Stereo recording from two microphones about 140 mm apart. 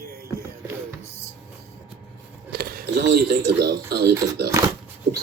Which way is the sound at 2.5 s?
90° right.